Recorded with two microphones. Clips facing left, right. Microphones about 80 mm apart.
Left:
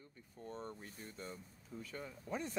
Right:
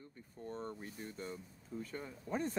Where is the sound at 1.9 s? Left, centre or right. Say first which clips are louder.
Right 2 dB; right.